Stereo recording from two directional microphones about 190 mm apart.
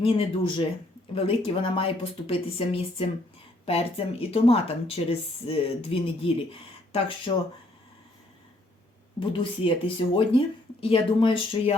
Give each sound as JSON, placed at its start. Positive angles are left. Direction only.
{"t": 0.0, "sound": "speech", "side_deg": 30}
{"t": 9.3, "sound": "speech", "side_deg": 25}